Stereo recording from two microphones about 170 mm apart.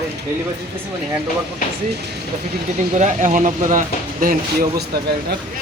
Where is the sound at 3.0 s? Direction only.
45° right (ahead or behind).